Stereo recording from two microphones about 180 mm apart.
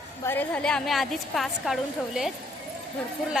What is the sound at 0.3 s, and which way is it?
A woman's voice, 10° left (ahead or behind).